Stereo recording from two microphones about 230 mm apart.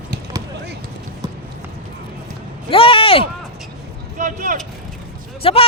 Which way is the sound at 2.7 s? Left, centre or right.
Left.